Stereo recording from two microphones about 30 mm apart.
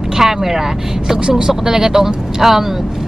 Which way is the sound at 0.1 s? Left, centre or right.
Centre.